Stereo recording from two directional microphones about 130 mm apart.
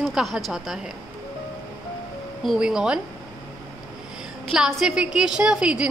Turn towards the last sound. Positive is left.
turn(degrees=-10)  # may be behind; listen again after turning